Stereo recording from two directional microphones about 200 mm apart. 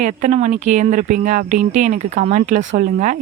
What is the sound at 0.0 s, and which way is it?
Speech, 40° right (ahead or behind).